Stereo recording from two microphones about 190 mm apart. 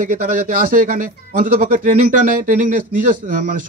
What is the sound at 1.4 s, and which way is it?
Speech, 45° right (ahead or behind).